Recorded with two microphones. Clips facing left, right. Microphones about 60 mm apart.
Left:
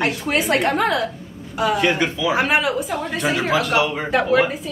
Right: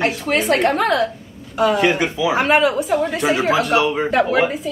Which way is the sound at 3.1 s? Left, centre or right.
Centre.